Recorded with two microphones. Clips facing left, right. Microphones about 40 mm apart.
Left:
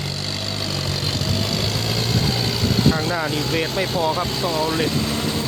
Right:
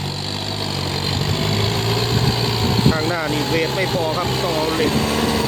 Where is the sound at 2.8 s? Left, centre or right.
Right.